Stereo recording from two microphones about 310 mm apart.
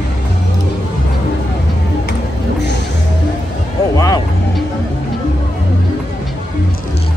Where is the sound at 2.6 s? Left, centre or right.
Left.